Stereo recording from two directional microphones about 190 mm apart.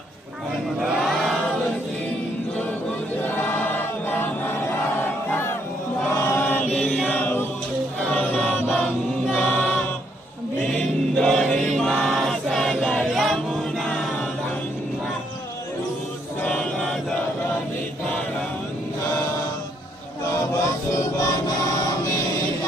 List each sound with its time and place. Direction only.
0.8 s chant: centre (ahead or behind)
3.2 s choir: 10° left (ahead or behind)
6.2 s chant: 10° left (ahead or behind)
8.1 s choir: 5° left (ahead or behind)
10.7 s chant: 5° left (ahead or behind)
16.4 s chant: 5° left (ahead or behind)
20.9 s music: 15° left (ahead or behind)